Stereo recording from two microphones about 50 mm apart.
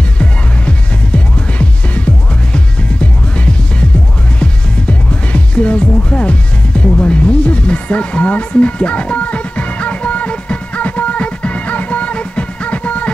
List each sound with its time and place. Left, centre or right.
0.2 s music: left